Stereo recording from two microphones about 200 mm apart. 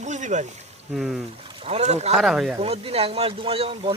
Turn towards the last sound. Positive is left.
turn(degrees=-30)  # may be behind; listen again after turning